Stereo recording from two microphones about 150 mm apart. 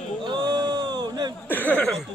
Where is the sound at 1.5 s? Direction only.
10° left (ahead or behind).